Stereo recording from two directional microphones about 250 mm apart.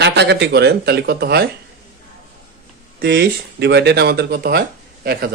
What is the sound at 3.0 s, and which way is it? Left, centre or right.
Speech, right.